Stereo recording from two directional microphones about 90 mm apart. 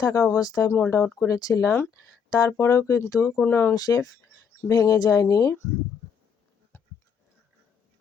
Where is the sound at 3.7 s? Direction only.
40° left (ahead or behind).